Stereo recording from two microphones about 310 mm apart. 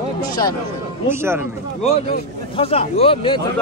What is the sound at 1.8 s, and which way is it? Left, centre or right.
Speech, centre.